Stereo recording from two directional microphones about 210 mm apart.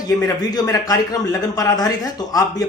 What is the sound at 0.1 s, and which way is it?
A man's voice, 15° left (ahead or behind).